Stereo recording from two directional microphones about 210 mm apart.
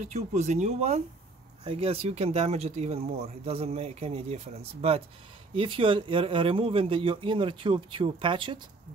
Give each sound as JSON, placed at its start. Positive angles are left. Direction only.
{"t": 0.0, "sound": "speech", "side_deg": -35}